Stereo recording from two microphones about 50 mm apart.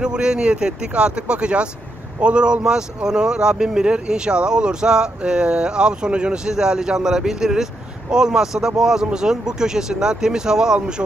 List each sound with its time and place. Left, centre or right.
0.0 s speech: centre